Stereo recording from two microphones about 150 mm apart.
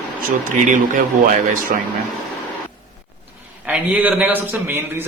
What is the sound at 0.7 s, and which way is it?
Speech, 65° right (ahead or behind).